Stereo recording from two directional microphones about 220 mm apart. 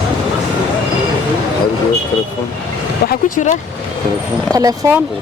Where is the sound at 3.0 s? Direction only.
35° left (ahead or behind).